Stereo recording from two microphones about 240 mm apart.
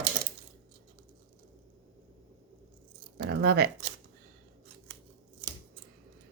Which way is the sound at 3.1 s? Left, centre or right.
Right.